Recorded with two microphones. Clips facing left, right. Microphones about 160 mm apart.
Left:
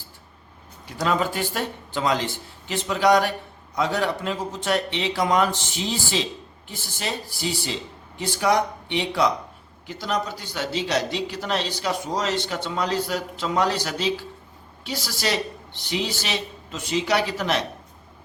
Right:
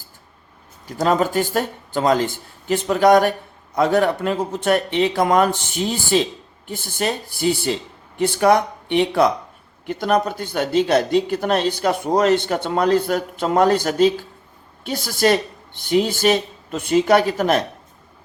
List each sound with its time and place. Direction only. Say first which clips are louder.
0.9 s speech: right 5 dB; 40° right (ahead or behind)